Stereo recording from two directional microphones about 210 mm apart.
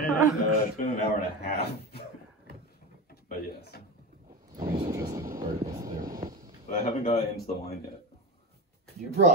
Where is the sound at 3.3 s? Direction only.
45° left (ahead or behind).